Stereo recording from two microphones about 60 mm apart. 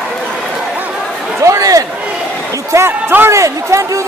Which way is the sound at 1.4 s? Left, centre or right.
Right.